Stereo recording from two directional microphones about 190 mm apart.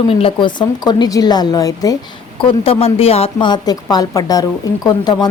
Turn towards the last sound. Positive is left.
turn(degrees=20)  # may be behind; listen again after turning